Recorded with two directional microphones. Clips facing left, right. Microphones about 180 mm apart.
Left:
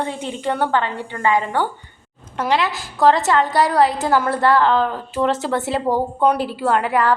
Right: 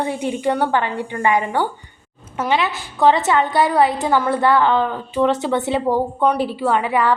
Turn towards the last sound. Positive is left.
turn(degrees=0)  # may be behind; listen again after turning